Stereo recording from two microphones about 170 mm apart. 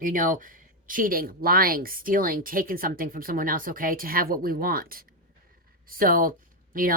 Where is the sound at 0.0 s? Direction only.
50° right (ahead or behind).